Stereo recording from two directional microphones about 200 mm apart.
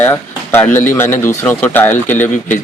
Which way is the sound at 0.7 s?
40° left (ahead or behind).